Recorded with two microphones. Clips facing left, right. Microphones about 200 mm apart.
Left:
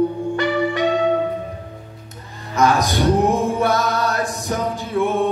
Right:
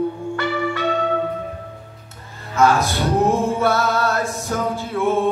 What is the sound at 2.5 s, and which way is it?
Male singing, 15° left (ahead or behind).